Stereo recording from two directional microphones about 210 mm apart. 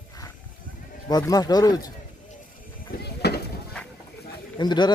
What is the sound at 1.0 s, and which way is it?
Speech, 20° left (ahead or behind).